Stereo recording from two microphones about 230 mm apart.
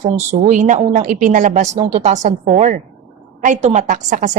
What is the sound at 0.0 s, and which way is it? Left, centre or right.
A woman's voice, right.